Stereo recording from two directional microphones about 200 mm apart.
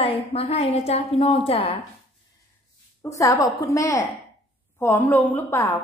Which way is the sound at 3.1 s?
15° left (ahead or behind).